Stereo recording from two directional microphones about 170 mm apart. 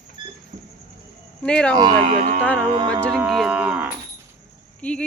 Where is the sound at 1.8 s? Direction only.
25° right (ahead or behind).